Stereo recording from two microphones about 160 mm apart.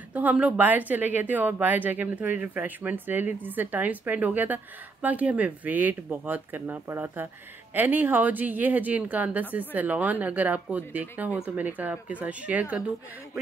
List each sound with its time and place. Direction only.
0.1 s a woman's voice: 10° right (ahead or behind)